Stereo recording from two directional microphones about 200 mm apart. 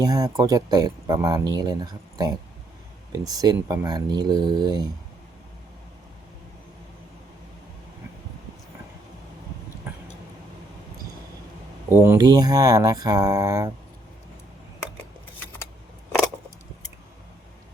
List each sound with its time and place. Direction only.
0.0 s speech: 20° right (ahead or behind)
9.9 s a sound: 10° right (ahead or behind)
11.9 s speech: 15° right (ahead or behind)